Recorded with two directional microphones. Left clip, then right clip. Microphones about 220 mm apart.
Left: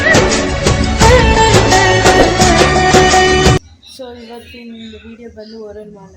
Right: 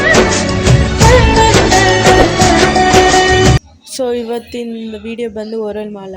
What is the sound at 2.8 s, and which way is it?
Music, centre (ahead or behind).